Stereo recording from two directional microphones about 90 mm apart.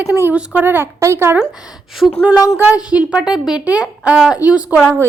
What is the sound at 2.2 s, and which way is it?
A woman's voice, 15° right (ahead or behind).